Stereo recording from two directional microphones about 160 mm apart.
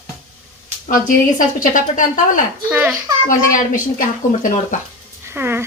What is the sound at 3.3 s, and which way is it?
A woman's voice, 55° left (ahead or behind).